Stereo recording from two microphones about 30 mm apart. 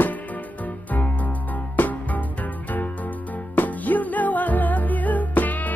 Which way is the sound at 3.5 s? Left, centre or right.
Left.